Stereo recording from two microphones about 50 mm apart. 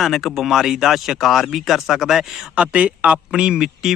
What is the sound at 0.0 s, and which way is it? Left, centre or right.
Speech, centre.